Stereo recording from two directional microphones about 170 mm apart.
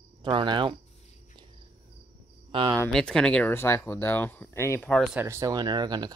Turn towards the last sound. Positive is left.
turn(degrees=-25)  # may be behind; listen again after turning